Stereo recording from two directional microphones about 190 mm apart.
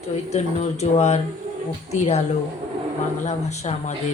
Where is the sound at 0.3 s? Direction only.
35° left (ahead or behind).